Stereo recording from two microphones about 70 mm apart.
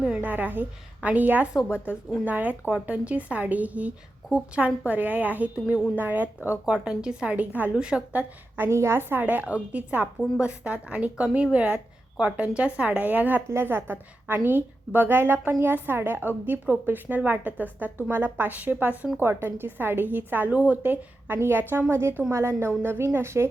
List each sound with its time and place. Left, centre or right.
0.0 s a sound: centre
1.0 s a woman's voice: right
6.8 s a woman's voice: centre
8.5 s a woman's voice: right
9.2 s a woman's voice: right
13.5 s a woman's voice: right